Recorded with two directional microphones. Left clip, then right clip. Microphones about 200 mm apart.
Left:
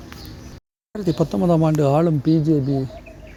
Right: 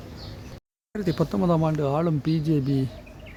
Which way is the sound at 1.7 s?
25° left (ahead or behind).